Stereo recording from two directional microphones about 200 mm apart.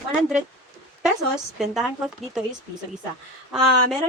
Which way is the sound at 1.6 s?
Centre (ahead or behind).